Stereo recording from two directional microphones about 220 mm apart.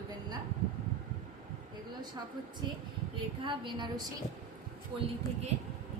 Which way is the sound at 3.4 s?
20° right (ahead or behind).